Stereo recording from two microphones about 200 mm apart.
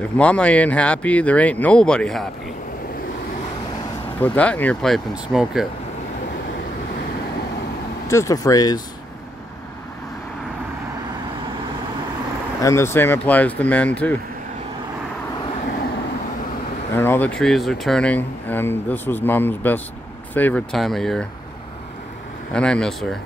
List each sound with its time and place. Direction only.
0.2 s speech: 5° left (ahead or behind)
4.2 s speech: 10° left (ahead or behind)
8.1 s speech: 15° left (ahead or behind)
12.5 s speech: 15° left (ahead or behind)
16.9 s speech: 10° left (ahead or behind)
22.5 s speech: 5° left (ahead or behind)